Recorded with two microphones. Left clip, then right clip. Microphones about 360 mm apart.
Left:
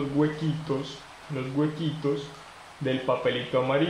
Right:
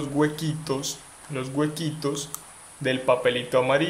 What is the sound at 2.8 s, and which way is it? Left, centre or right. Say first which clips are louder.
Speech: right 4 dB; right.